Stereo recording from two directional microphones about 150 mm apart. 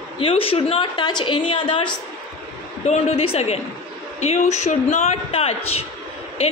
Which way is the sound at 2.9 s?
45° left (ahead or behind).